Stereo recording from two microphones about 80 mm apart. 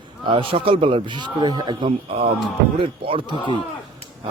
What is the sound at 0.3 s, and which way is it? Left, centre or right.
A man's voice, right.